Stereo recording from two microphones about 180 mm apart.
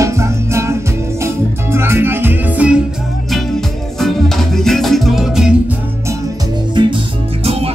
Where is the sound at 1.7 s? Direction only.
15° right (ahead or behind).